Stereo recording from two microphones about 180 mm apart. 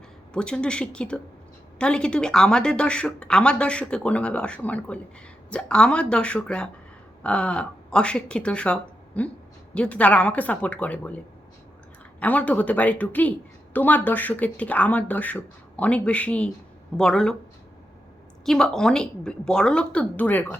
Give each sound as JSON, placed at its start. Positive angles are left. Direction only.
{"t": 0.3, "sound": "a woman's voice", "side_deg": 5}
{"t": 12.2, "sound": "a woman's voice", "side_deg": 10}
{"t": 18.4, "sound": "a woman's voice", "side_deg": 0}